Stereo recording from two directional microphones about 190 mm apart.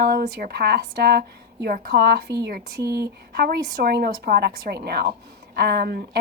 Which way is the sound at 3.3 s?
55° right (ahead or behind).